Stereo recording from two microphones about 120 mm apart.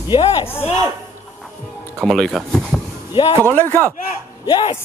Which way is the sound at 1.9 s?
5° left (ahead or behind).